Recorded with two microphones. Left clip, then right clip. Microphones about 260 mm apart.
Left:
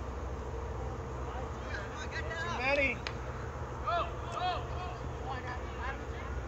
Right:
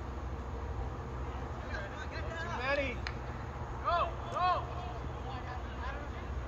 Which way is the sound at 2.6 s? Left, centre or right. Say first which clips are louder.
Left 4 dB; left.